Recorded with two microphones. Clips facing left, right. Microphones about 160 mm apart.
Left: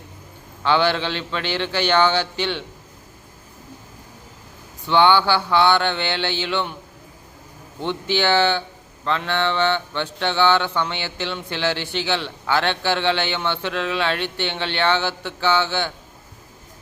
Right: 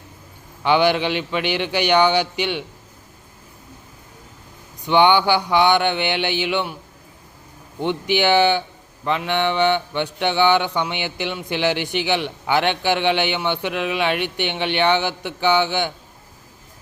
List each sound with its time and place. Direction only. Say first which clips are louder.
0.6 s mantra: right 2 dB; 15° right (ahead or behind)
4.9 s mantra: right 1 dB; 15° right (ahead or behind)
7.8 s mantra: right 2 dB; 15° right (ahead or behind)